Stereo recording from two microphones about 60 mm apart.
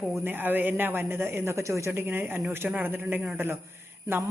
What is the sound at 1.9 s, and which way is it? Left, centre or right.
A woman's voice, right.